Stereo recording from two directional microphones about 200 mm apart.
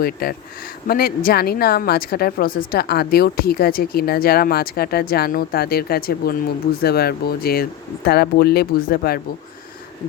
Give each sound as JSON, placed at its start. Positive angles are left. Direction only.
{"t": 0.0, "sound": "speech", "side_deg": 50}